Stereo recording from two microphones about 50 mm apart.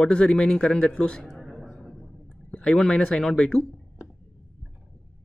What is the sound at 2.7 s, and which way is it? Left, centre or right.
Speech, centre.